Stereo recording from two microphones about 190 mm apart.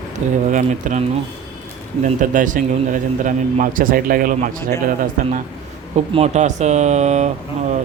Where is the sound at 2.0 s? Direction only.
45° right (ahead or behind).